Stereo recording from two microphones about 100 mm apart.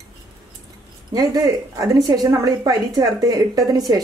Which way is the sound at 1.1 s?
40° right (ahead or behind).